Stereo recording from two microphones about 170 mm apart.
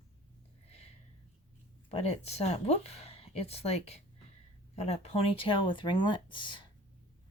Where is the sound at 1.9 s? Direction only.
40° left (ahead or behind).